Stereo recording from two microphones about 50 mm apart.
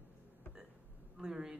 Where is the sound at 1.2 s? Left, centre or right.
Centre.